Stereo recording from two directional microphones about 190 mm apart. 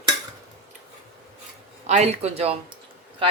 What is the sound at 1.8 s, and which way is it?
Speech, 35° right (ahead or behind).